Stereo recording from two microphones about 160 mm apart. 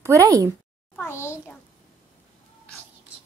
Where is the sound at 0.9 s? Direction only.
15° left (ahead or behind).